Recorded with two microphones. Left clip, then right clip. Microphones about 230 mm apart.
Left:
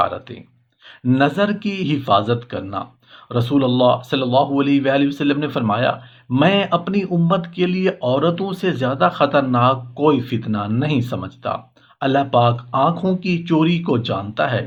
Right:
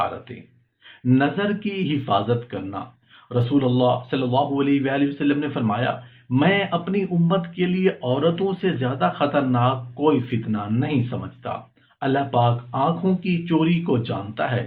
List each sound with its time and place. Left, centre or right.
1.0 s speech: left